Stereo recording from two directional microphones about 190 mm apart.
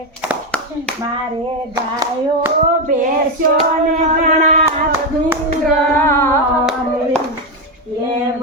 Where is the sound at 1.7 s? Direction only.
20° right (ahead or behind).